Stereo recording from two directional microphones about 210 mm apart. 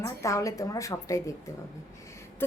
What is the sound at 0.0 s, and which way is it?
A woman's voice, 15° left (ahead or behind).